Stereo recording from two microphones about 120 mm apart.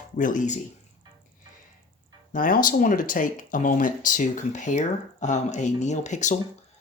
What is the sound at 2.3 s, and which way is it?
Speech, 90° left.